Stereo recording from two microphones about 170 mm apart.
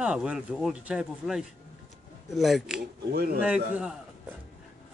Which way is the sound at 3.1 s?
65° right (ahead or behind).